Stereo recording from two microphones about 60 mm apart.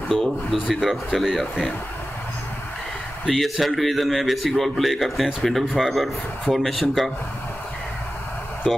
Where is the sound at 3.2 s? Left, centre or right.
Centre.